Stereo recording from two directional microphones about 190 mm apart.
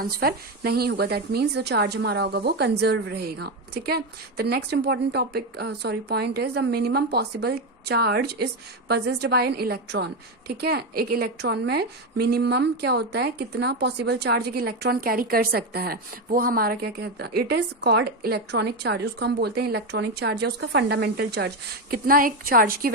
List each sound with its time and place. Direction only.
0.0 s a woman's voice: 55° right (ahead or behind)